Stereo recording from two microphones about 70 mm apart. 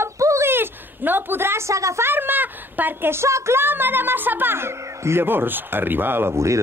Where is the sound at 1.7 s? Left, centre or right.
Right.